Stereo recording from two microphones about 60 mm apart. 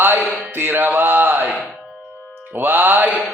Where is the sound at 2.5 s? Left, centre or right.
Right.